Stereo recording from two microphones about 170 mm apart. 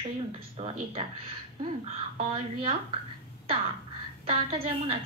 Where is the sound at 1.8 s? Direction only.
35° right (ahead or behind).